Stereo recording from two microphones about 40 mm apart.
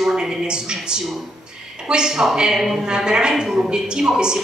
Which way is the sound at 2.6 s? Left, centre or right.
Centre.